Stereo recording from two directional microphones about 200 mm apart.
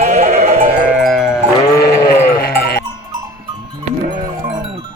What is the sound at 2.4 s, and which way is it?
Sheep, 50° left (ahead or behind).